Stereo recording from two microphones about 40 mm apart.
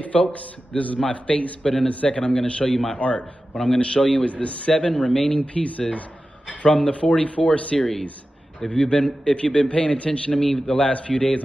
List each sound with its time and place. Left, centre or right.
0.0 s a man's voice: left
1.6 s speech: centre
2.0 s speech: left
3.0 s a man's voice: left
3.5 s speech: centre
3.8 s a man's voice: left
4.9 s speech: centre
5.4 s a man's voice: left
8.6 s speech: centre
10.3 s speech: centre